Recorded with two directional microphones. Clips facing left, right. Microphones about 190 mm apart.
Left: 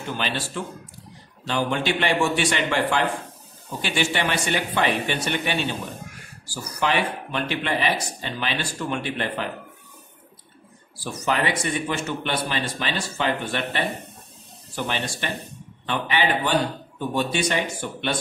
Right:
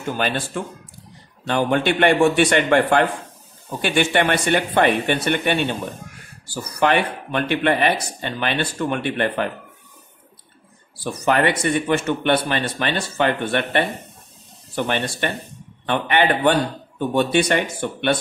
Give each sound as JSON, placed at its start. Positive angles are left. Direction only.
{"t": 0.2, "sound": "speech", "side_deg": -50}
{"t": 11.2, "sound": "speech", "side_deg": -60}
{"t": 14.9, "sound": "speech", "side_deg": -55}